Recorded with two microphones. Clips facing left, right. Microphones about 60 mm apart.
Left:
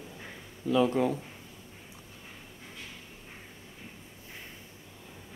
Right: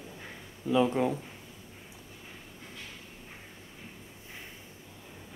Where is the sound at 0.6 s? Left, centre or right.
Centre.